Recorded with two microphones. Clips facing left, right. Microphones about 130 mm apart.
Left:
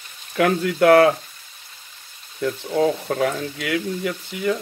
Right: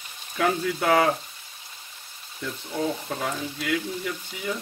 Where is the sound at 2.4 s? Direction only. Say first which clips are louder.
Left 9 dB; 75° left (ahead or behind).